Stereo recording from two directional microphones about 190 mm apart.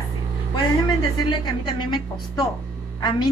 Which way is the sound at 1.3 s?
25° left (ahead or behind).